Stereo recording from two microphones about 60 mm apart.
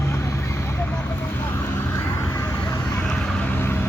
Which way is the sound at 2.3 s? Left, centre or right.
Left.